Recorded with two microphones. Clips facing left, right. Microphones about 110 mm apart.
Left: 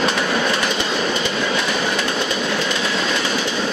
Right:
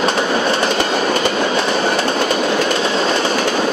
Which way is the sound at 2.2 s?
55° right (ahead or behind).